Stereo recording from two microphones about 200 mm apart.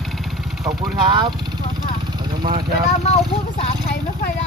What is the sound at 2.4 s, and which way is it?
Speech, 20° right (ahead or behind).